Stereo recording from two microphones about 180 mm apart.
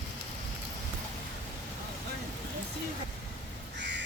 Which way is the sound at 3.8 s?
80° right.